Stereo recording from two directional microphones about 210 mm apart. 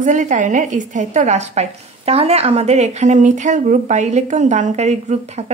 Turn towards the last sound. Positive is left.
turn(degrees=-30)  # may be behind; listen again after turning